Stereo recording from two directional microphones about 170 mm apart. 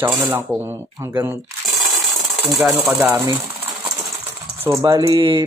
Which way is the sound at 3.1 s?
15° right (ahead or behind).